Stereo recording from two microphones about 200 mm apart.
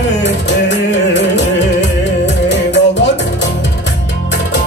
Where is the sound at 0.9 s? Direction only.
60° left (ahead or behind).